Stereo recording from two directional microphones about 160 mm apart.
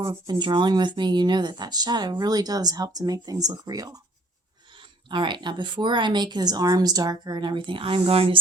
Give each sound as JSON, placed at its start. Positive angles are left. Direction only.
{"t": 0.0, "sound": "speech", "side_deg": -25}
{"t": 5.0, "sound": "speech", "side_deg": -30}